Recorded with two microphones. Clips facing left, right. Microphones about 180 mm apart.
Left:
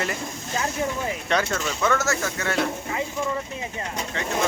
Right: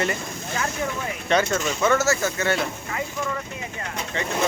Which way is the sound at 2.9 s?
25° left (ahead or behind).